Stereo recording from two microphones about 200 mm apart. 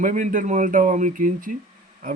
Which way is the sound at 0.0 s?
40° right (ahead or behind).